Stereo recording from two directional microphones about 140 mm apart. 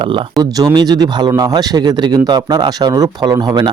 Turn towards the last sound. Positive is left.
turn(degrees=-30)  # may be behind; listen again after turning